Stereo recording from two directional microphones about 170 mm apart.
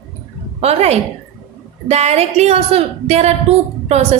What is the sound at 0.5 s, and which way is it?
A woman's voice, 40° right (ahead or behind).